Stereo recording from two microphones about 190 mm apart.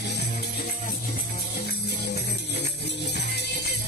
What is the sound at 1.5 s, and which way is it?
Music, 55° left (ahead or behind).